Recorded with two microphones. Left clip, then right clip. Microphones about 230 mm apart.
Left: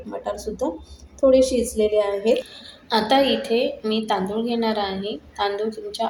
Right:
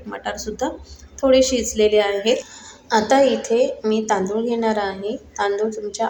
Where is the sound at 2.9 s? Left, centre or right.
Centre.